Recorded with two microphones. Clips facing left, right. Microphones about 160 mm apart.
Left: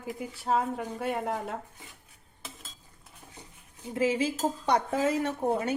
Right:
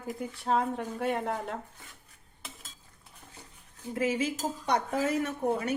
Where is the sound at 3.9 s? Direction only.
30° left (ahead or behind).